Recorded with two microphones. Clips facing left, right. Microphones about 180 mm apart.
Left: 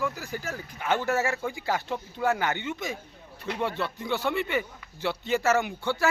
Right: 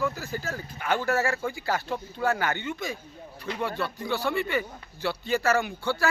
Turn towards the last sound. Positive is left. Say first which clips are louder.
# even
turn(degrees=20)  # may be behind; listen again after turning